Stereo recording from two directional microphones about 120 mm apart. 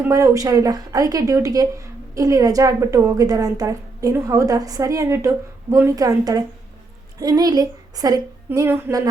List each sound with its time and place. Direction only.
0.1 s a woman's voice: 30° right (ahead or behind)